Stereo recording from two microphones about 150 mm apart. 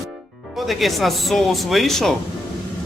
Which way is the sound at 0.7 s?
Centre (ahead or behind).